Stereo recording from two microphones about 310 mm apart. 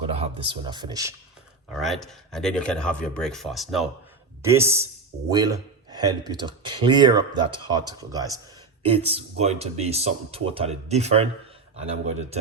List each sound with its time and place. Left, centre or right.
0.0 s speech: centre
1.7 s speech: centre
5.1 s speech: right
5.9 s speech: centre